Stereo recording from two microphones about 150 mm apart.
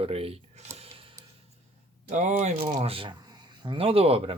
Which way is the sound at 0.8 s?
40° right (ahead or behind).